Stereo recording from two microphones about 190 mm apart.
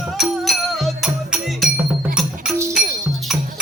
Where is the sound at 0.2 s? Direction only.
Centre (ahead or behind).